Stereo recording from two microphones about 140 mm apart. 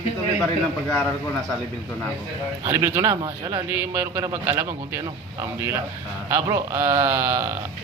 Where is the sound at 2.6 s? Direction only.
20° right (ahead or behind).